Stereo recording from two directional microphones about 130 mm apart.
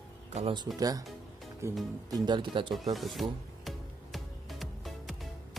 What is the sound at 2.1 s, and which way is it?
Speech, 35° right (ahead or behind).